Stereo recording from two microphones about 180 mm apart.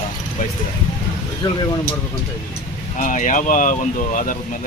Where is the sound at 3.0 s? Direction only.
45° left (ahead or behind).